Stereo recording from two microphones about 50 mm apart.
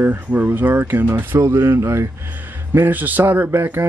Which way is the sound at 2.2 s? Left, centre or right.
Right.